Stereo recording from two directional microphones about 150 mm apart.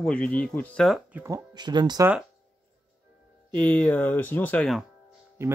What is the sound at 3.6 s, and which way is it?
Speech, 10° left (ahead or behind).